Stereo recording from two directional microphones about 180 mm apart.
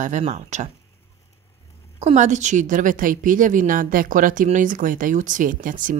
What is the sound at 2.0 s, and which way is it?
Speech, 40° right (ahead or behind).